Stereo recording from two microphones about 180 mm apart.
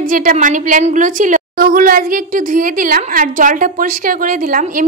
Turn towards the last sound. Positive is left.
turn(degrees=-50)  # may be behind; listen again after turning